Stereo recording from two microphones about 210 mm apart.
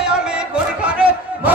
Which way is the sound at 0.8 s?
5° right (ahead or behind).